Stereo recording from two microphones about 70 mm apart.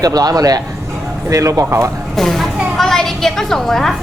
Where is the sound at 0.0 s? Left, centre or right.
Right.